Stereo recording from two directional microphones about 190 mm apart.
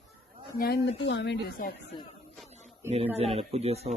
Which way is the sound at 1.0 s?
65° left (ahead or behind).